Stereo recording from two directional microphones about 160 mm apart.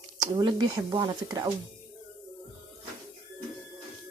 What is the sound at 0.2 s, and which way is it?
Speech, 25° right (ahead or behind).